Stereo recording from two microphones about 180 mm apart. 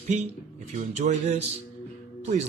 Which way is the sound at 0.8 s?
40° right (ahead or behind).